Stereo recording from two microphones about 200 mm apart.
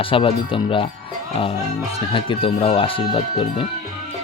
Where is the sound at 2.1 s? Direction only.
25° left (ahead or behind).